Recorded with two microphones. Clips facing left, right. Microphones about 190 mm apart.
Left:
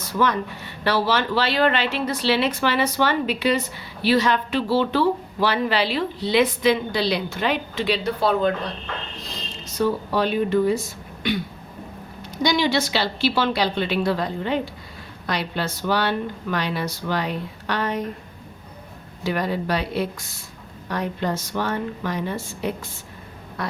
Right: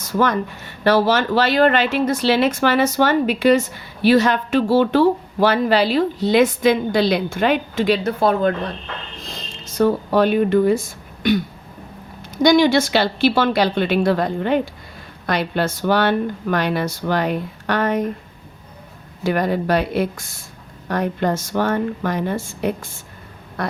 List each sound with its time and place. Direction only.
0.2 s speech: 45° right (ahead or behind)
9.7 s speech: 50° right (ahead or behind)
12.4 s speech: 50° right (ahead or behind)
19.2 s speech: 50° right (ahead or behind)